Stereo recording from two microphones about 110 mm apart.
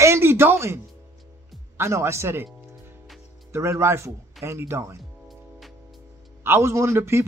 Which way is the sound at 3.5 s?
25° right (ahead or behind).